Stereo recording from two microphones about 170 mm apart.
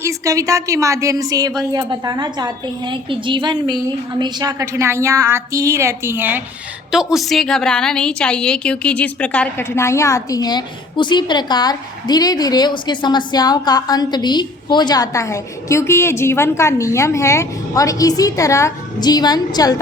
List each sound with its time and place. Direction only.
0.0 s a woman's voice: 20° right (ahead or behind); by 19.7 s 25° left (ahead or behind)